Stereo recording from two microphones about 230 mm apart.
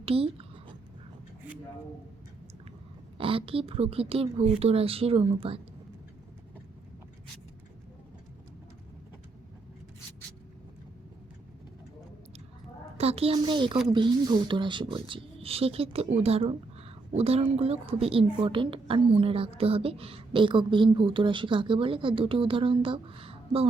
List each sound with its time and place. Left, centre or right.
0.0 s a sound: right
3.2 s a woman's voice: right
13.0 s a woman's voice: right